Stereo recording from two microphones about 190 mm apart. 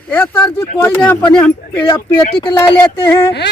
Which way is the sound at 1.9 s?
25° left (ahead or behind).